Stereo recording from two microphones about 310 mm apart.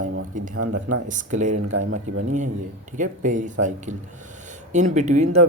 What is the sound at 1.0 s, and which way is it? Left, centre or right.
Speech, right.